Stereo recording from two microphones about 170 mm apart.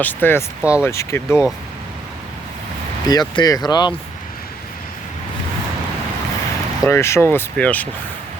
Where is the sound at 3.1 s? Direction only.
25° left (ahead or behind).